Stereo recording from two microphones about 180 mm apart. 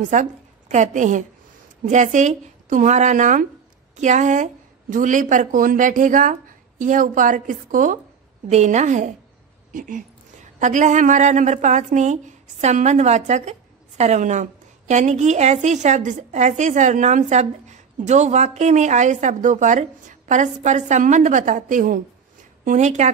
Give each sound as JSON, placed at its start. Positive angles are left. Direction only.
{"t": 0.1, "sound": "a woman's voice", "side_deg": -45}